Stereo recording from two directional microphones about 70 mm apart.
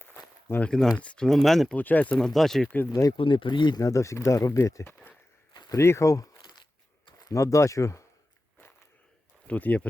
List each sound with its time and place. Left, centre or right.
0.5 s speech: left
0.9 s speech: centre
1.7 s speech: left
2.1 s speech: centre
2.9 s speech: left
3.8 s speech: left
5.7 s a sound: left
7.3 s speech: left
9.5 s speech: left